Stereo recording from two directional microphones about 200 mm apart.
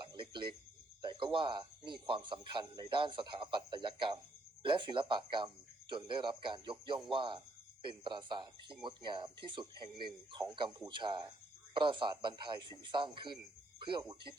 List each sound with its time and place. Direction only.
0.0 s a sound: 25° right (ahead or behind)
1.0 s a man's voice: 25° right (ahead or behind)
10.8 s a man's voice: 20° right (ahead or behind)
13.7 s music: 25° right (ahead or behind)